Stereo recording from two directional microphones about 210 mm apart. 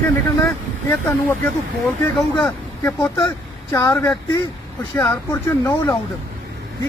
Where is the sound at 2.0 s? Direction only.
10° left (ahead or behind).